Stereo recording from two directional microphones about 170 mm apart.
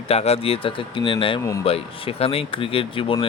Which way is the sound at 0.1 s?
35° left (ahead or behind).